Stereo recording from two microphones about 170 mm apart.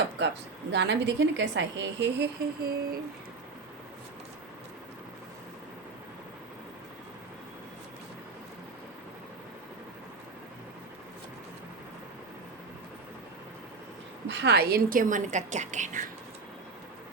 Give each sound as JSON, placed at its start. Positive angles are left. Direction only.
{"t": 0.7, "sound": "a woman's voice", "side_deg": -90}
{"t": 14.3, "sound": "a woman's voice", "side_deg": -75}